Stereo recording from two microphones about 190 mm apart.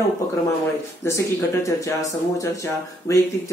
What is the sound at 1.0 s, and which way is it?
Speech, 15° left (ahead or behind).